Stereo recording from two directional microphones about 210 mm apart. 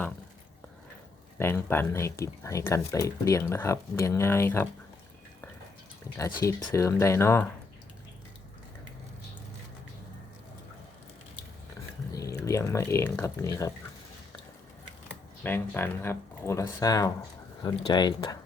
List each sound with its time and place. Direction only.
1.4 s speech: 10° left (ahead or behind)
6.1 s speech: 15° left (ahead or behind)
12.1 s a sound: 15° left (ahead or behind)
12.5 s speech: 15° left (ahead or behind)
15.4 s speech: 10° left (ahead or behind)